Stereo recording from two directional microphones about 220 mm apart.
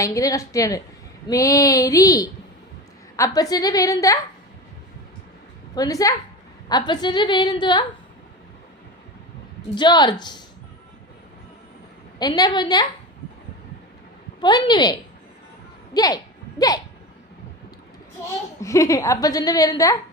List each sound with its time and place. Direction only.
0.0 s a woman's voice: 15° left (ahead or behind)
5.7 s a woman's voice: 15° left (ahead or behind)
9.7 s a woman's voice: 20° left (ahead or behind)
12.2 s a woman's voice: 20° left (ahead or behind)
14.4 s a woman's voice: 20° left (ahead or behind)
16.0 s speech: 15° left (ahead or behind)
18.6 s a woman's voice: 15° left (ahead or behind)